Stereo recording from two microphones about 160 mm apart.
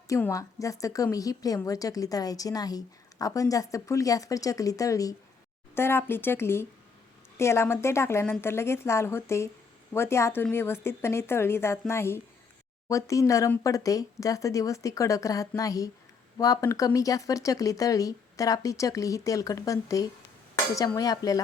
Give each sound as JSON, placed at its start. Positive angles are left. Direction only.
{"t": 0.1, "sound": "a woman's voice", "side_deg": 20}